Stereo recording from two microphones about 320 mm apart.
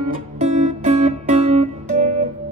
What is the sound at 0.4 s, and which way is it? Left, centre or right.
Music, right.